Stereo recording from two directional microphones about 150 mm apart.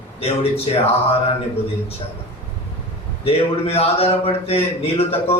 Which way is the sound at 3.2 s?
40° left (ahead or behind).